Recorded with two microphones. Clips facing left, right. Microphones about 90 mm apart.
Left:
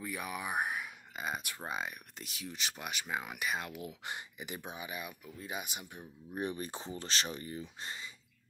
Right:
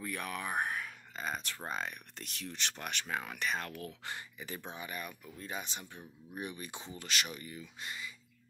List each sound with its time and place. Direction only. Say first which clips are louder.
0.0 s speech: even; 10° left (ahead or behind)
6.3 s speech: left 5 dB; 35° left (ahead or behind)